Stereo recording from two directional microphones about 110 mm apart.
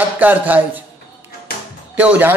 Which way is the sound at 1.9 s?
15° right (ahead or behind).